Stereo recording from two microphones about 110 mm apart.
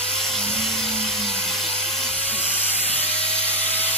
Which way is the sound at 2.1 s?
70° left (ahead or behind).